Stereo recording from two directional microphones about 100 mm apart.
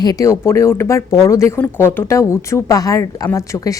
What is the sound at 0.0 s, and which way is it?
A woman's voice, 40° left (ahead or behind).